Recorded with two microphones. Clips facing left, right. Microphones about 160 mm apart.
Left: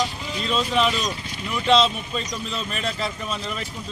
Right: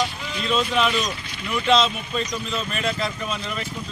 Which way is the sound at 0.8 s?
35° left (ahead or behind).